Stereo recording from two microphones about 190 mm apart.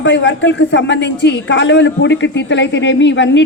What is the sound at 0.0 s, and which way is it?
A man's voice, 70° left (ahead or behind).